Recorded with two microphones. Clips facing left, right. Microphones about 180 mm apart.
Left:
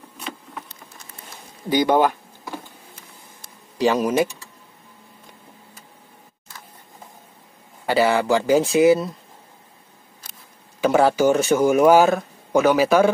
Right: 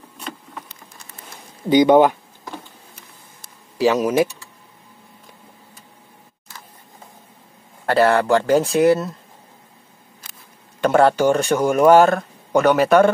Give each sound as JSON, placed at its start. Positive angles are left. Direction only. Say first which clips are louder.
{"t": 1.7, "sound": "speech", "louder": "right 5 dB", "side_deg": -20}
{"t": 3.7, "sound": "speech", "louder": "right 2 dB", "side_deg": -5}
{"t": 7.8, "sound": "speech", "louder": "right 3 dB", "side_deg": 0}
{"t": 10.8, "sound": "speech", "louder": "right 2 dB", "side_deg": 5}